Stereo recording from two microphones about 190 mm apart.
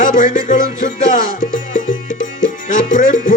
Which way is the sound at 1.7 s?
45° left (ahead or behind).